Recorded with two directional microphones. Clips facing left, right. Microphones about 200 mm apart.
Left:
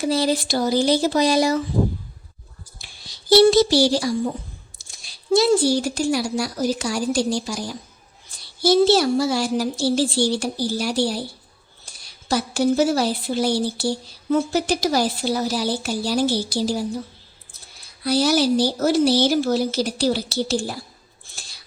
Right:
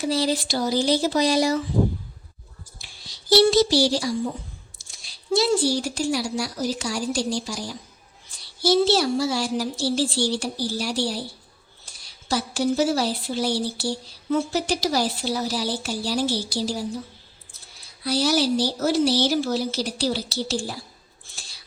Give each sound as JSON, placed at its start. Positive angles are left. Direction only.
{"t": 0.0, "sound": "speech", "side_deg": 55}
{"t": 3.1, "sound": "a sound", "side_deg": 55}
{"t": 4.9, "sound": "speech", "side_deg": 50}
{"t": 8.3, "sound": "child singing", "side_deg": 50}
{"t": 8.6, "sound": "speech", "side_deg": 50}
{"t": 12.3, "sound": "speech", "side_deg": 50}
{"t": 18.0, "sound": "speech", "side_deg": 50}